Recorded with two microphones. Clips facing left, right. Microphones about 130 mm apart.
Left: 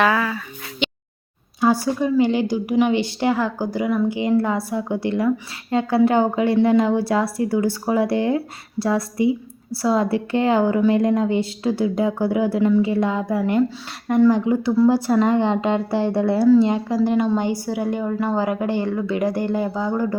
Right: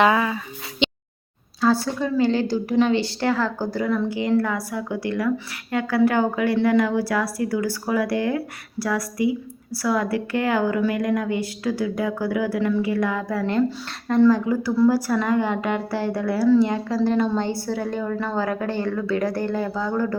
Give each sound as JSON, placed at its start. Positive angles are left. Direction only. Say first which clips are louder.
{"t": 0.0, "sound": "a sound", "louder": "right 1 dB", "side_deg": -20}
{"t": 1.6, "sound": "a woman's voice", "louder": "left 2 dB", "side_deg": 15}
{"t": 13.4, "sound": "a woman's voice", "louder": "even", "side_deg": 10}